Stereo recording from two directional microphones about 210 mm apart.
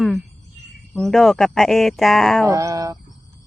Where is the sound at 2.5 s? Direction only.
15° right (ahead or behind).